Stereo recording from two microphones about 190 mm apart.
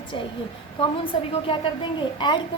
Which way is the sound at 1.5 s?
30° left (ahead or behind).